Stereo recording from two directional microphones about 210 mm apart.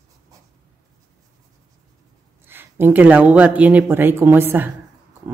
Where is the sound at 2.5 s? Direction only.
10° right (ahead or behind).